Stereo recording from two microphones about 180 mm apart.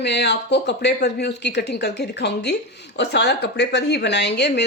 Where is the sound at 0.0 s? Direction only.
70° left (ahead or behind).